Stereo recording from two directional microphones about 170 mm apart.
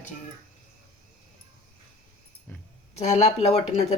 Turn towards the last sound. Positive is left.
turn(degrees=40)  # may be behind; listen again after turning